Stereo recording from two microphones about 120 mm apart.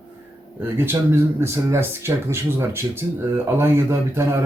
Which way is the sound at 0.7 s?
20° right (ahead or behind).